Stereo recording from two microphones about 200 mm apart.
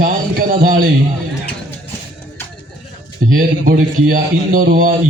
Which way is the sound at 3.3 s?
45° right (ahead or behind).